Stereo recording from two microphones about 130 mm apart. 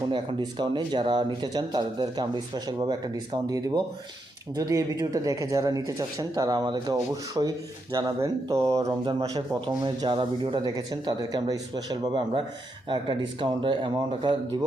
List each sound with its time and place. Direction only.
0.1 s speech: 35° right (ahead or behind)